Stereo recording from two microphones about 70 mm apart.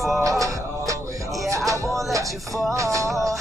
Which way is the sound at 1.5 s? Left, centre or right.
Right.